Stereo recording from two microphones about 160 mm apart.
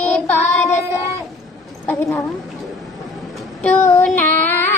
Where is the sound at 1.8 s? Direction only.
20° left (ahead or behind).